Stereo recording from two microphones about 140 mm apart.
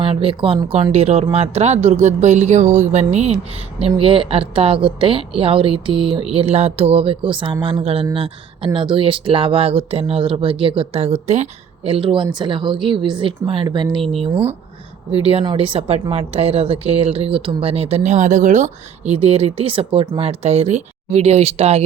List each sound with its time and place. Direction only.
0.0 s speech: 40° right (ahead or behind)
15.1 s speech: 45° right (ahead or behind)